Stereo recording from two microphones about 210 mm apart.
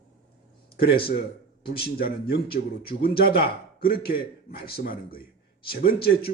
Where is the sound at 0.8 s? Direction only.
45° left (ahead or behind).